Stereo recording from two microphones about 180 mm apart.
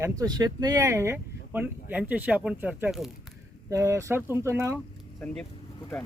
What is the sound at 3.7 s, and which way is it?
Speech, 15° right (ahead or behind).